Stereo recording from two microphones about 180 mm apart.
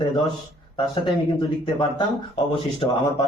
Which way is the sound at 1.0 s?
25° left (ahead or behind).